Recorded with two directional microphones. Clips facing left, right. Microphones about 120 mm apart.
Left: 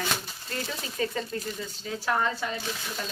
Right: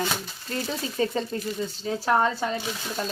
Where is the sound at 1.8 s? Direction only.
35° right (ahead or behind).